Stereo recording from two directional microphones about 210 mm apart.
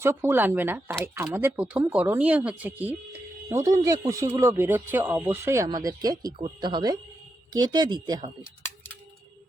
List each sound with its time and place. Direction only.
0.0 s speech: 10° right (ahead or behind)